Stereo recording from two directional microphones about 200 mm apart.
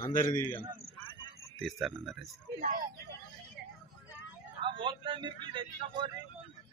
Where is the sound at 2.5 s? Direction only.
45° right (ahead or behind).